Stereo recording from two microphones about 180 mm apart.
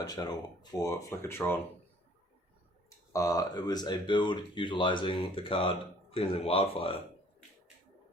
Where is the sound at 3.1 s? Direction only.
20° left (ahead or behind).